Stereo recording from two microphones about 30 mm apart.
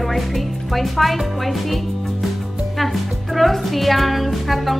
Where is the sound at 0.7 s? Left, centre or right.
Centre.